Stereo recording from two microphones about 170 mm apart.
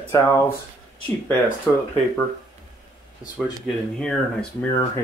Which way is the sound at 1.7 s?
10° left (ahead or behind).